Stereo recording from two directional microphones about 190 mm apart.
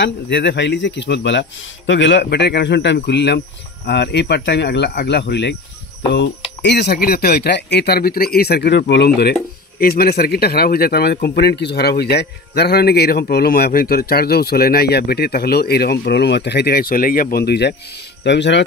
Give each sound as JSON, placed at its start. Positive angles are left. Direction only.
{"t": 0.0, "sound": "speech", "side_deg": 65}
{"t": 6.6, "sound": "speech", "side_deg": 60}